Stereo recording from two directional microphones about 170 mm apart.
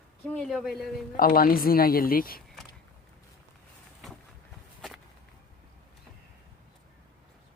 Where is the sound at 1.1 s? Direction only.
60° left (ahead or behind).